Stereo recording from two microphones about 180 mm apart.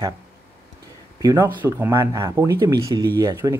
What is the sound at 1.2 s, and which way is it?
Speech, 20° right (ahead or behind).